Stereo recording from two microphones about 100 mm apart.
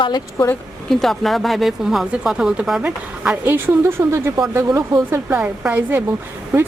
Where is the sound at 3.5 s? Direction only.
20° right (ahead or behind).